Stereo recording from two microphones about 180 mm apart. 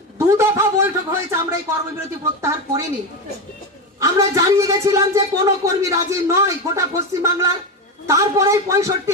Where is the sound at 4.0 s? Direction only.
20° right (ahead or behind).